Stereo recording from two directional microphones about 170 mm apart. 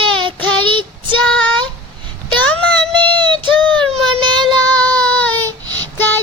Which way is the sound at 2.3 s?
5° left (ahead or behind).